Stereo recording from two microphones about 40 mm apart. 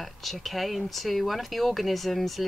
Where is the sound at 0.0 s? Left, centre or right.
Centre.